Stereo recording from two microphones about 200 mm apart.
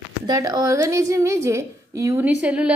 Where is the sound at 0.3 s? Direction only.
20° right (ahead or behind).